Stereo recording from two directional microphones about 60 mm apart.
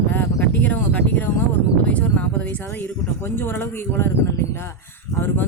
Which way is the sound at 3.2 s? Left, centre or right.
Left.